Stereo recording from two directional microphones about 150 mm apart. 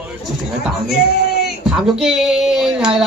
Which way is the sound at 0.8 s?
90° left.